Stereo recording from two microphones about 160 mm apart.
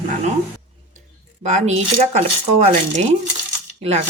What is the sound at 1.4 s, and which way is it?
Speech, 45° right (ahead or behind).